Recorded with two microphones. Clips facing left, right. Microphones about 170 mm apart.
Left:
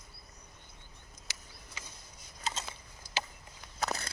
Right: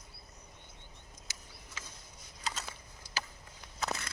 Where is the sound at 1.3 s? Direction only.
70° left (ahead or behind).